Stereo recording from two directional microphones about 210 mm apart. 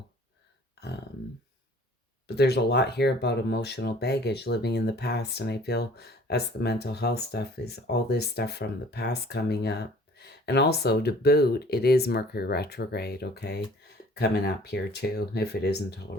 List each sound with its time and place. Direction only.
2.2 s speech: 50° left (ahead or behind)